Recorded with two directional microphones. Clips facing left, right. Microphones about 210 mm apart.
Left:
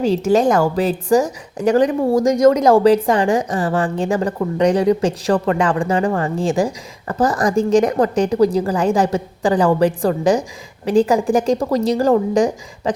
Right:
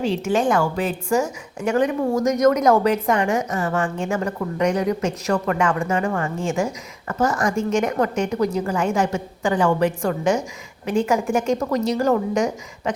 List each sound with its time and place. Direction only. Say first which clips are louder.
0.0 s a woman's voice: left 6 dB; 40° left (ahead or behind)